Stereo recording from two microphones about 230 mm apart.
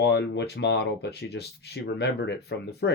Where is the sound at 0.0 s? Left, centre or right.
Left.